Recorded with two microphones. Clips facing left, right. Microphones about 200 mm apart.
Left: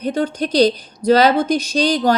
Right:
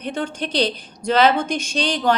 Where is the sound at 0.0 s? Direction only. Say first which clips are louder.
Left 6 dB; 40° left (ahead or behind).